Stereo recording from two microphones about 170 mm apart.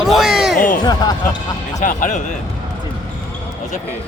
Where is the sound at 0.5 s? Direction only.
55° left (ahead or behind).